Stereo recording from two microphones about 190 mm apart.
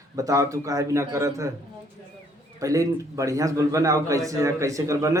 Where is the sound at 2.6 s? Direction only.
15° right (ahead or behind).